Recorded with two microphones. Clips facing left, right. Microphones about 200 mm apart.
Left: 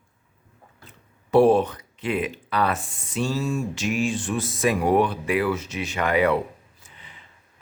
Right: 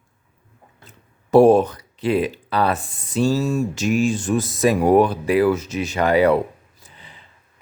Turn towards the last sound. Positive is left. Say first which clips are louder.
# right 3 dB
turn(degrees=-35)  # may be behind; listen again after turning